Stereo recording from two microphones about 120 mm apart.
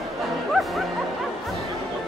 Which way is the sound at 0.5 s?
Centre (ahead or behind).